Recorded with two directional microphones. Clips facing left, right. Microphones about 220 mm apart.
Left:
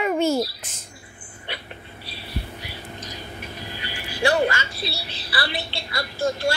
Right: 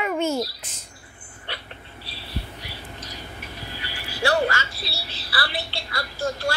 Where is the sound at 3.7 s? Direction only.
20° left (ahead or behind).